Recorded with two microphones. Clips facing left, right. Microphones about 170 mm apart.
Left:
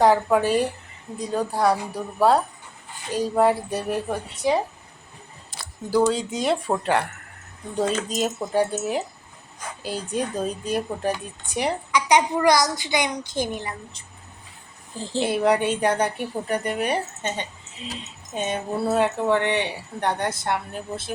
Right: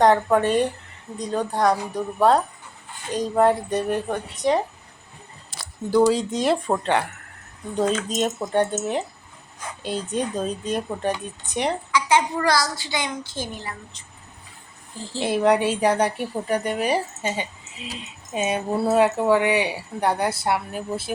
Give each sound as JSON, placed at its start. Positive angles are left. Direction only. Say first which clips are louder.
{"t": 0.0, "sound": "a woman's voice", "louder": "right 1 dB", "side_deg": 5}
{"t": 5.5, "sound": "a sound", "louder": "even", "side_deg": -90}
{"t": 6.1, "sound": "a woman's voice", "louder": "right 2 dB", "side_deg": 0}
{"t": 11.9, "sound": "a woman's voice", "louder": "left 2 dB", "side_deg": 15}
{"t": 15.2, "sound": "a woman's voice", "louder": "right 1 dB", "side_deg": 0}